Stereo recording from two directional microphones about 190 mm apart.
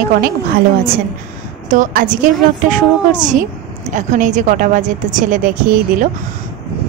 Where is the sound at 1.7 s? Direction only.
45° right (ahead or behind).